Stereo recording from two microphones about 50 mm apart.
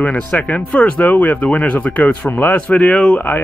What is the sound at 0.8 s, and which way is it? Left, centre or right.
Speech, left.